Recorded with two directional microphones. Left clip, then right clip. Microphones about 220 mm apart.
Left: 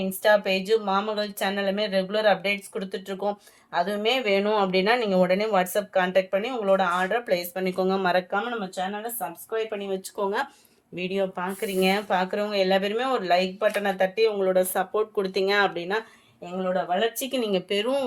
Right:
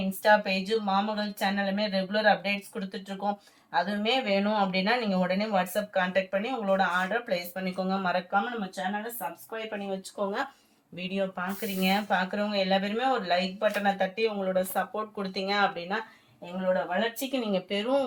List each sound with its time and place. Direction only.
0.2 s speech: 55° left (ahead or behind)